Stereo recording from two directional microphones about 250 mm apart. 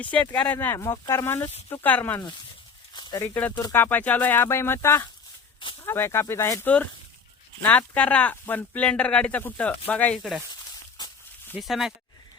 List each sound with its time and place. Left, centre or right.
0.0 s speech: centre
10.9 s a sound: centre
11.5 s speech: centre